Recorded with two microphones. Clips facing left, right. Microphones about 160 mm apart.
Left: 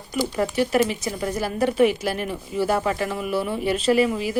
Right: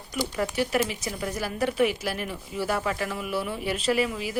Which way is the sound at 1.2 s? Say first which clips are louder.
Left 5 dB; 40° left (ahead or behind).